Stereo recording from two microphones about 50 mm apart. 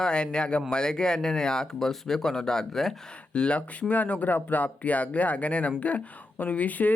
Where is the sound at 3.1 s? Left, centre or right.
Left.